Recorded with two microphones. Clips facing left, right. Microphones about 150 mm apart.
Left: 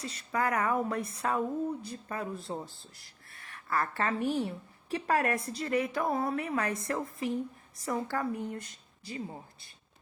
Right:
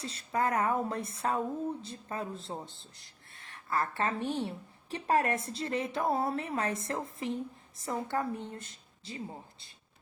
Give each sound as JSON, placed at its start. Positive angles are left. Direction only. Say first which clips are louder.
{"t": 0.0, "sound": "speech", "louder": "even", "side_deg": -30}